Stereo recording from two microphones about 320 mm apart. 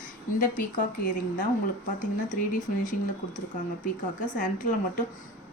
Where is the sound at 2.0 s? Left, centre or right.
Left.